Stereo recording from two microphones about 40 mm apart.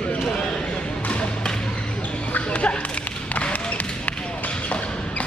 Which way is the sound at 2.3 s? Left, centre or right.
Left.